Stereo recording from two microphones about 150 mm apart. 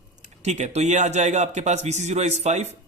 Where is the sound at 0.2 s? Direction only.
50° right (ahead or behind).